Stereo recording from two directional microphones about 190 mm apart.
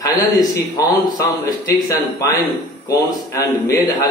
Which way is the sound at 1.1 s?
15° left (ahead or behind).